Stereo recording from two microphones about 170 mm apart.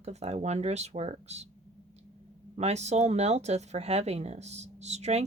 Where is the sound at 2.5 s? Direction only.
40° right (ahead or behind).